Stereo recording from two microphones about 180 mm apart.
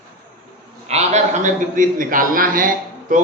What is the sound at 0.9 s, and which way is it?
Speech, 40° right (ahead or behind).